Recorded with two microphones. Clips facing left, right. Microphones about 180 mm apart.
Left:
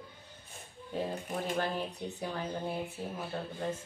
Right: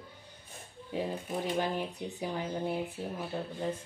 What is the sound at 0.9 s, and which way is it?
Speech, 15° right (ahead or behind).